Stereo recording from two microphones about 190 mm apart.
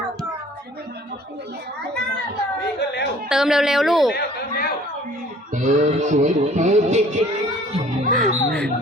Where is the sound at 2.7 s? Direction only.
60° left (ahead or behind).